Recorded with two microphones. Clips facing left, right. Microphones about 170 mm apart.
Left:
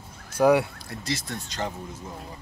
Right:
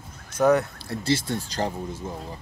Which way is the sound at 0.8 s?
30° right (ahead or behind).